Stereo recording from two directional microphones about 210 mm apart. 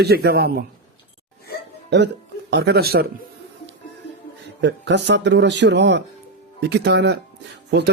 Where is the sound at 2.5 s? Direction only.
50° right (ahead or behind).